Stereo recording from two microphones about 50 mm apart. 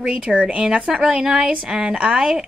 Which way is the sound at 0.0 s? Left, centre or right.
Right.